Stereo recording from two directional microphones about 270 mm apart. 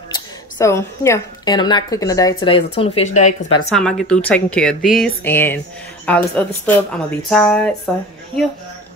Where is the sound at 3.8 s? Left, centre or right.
Centre.